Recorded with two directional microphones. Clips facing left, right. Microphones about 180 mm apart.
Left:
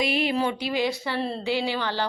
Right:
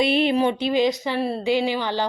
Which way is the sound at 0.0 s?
25° right (ahead or behind).